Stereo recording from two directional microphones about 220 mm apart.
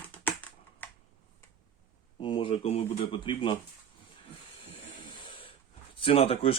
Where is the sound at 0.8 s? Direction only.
10° left (ahead or behind).